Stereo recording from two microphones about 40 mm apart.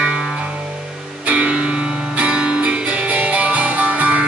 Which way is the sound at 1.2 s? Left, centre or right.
Right.